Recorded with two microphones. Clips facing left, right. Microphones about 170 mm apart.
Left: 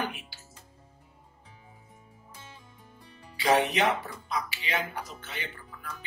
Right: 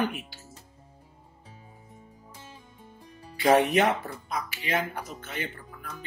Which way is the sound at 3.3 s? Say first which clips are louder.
Right 4 dB; 50° right (ahead or behind).